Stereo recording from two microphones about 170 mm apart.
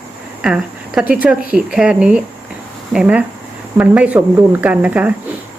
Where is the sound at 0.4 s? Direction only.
5° right (ahead or behind).